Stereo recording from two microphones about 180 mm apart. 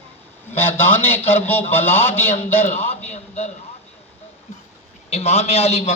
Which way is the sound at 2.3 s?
40° left (ahead or behind).